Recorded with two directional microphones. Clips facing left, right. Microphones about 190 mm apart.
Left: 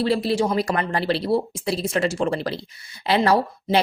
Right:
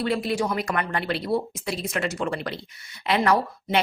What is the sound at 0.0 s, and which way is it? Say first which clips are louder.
Speech: left 4 dB; 30° left (ahead or behind).